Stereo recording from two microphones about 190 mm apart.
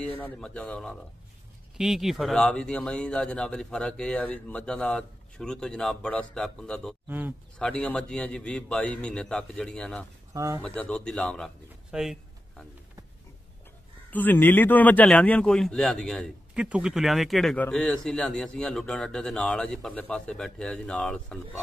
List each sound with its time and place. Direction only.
0.0 s a man's voice: 5° left (ahead or behind)
7.1 s speech: 10° right (ahead or behind)
7.5 s a man's voice: 5° left (ahead or behind)
10.3 s speech: 15° right (ahead or behind)
10.6 s speech: 5° left (ahead or behind)
14.1 s a man's voice: 10° left (ahead or behind)